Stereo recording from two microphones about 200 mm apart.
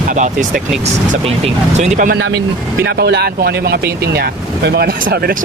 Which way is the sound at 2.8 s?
55° right (ahead or behind).